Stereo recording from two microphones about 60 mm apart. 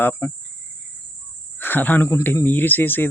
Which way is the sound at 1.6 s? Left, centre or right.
Left.